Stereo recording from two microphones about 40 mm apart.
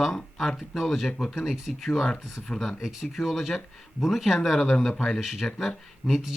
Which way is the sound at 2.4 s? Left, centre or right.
Centre.